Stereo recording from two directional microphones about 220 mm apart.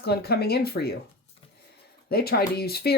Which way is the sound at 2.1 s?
45° left (ahead or behind).